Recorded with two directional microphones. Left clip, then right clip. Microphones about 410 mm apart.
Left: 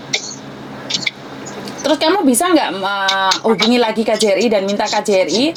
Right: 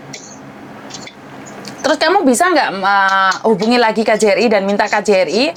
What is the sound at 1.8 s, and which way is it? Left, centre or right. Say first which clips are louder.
Speech: right 2 dB; right.